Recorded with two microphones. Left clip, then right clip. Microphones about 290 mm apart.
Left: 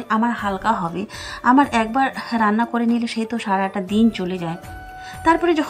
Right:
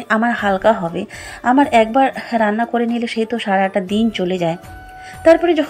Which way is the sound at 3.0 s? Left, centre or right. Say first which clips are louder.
Right 6 dB; left.